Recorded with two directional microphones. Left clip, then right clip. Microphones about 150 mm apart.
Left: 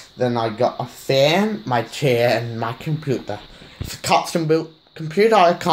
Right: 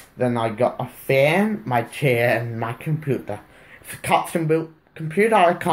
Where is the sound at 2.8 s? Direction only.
35° left (ahead or behind).